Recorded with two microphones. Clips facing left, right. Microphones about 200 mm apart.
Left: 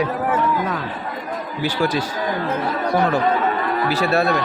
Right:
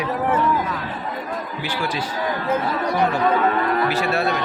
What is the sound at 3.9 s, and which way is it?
Speech, 35° left (ahead or behind).